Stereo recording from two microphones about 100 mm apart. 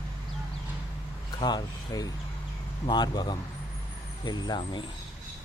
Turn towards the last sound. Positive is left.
turn(degrees=45)  # may be behind; listen again after turning